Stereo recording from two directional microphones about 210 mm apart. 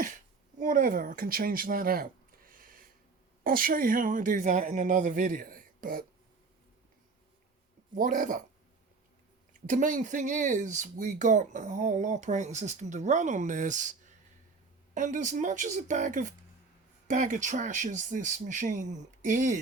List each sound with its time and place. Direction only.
0.6 s speech: 40° right (ahead or behind)
7.9 s speech: 40° right (ahead or behind)
9.5 s speech: 40° right (ahead or behind)
14.9 s speech: 35° right (ahead or behind)